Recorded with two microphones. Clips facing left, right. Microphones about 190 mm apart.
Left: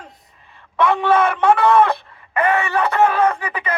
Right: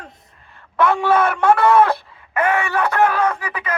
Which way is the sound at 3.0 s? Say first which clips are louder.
Left 2 dB; 10° left (ahead or behind).